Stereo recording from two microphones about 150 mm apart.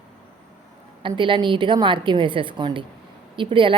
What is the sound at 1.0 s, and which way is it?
A woman's voice, 35° right (ahead or behind).